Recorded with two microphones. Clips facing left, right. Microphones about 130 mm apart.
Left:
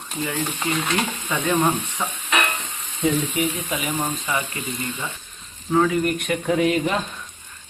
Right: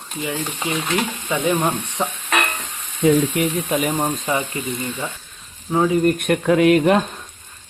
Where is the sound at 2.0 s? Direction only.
15° right (ahead or behind).